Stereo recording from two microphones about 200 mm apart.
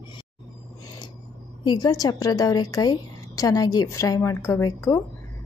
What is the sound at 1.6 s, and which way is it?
A woman's voice, 20° left (ahead or behind).